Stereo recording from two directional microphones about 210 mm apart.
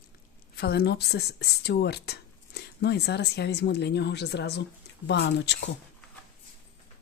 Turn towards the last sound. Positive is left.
turn(degrees=55)  # may be behind; listen again after turning